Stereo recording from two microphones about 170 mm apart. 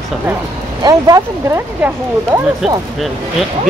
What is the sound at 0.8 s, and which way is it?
Speech, 20° right (ahead or behind).